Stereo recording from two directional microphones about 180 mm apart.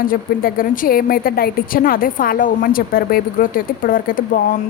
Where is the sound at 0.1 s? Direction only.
50° left (ahead or behind).